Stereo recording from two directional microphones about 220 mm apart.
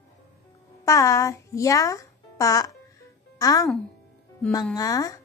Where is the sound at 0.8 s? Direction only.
15° left (ahead or behind).